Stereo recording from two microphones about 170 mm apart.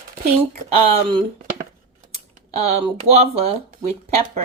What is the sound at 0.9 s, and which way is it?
Speech, 30° right (ahead or behind).